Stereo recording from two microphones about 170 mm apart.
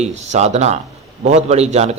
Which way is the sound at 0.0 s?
40° right (ahead or behind).